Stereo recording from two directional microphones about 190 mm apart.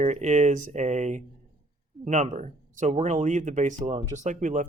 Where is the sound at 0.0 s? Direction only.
40° right (ahead or behind).